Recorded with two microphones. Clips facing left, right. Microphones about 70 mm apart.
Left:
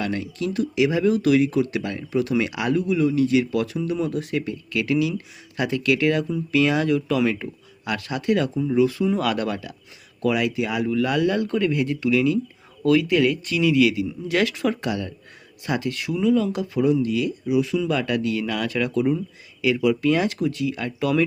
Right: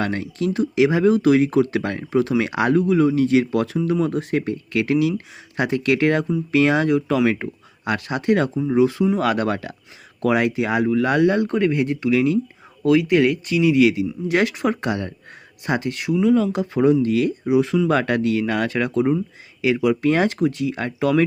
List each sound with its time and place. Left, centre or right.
0.0 s speech: right
12.8 s speech: right